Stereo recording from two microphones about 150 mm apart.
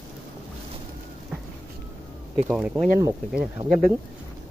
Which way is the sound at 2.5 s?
10° right (ahead or behind).